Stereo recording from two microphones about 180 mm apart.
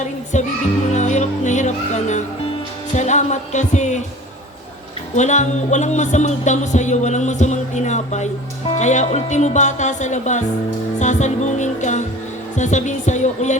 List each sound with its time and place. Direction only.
0.3 s music: 40° left (ahead or behind)
5.1 s music: 40° left (ahead or behind)